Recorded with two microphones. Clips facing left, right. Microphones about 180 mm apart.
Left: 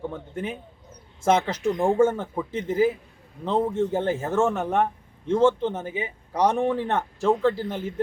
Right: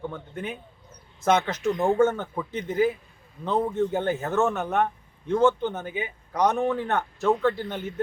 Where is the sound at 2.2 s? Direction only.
25° left (ahead or behind).